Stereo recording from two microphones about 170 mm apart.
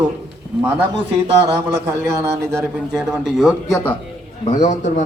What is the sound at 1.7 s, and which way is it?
Speech, 20° right (ahead or behind).